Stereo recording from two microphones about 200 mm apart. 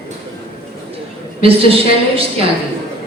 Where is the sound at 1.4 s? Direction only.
30° right (ahead or behind).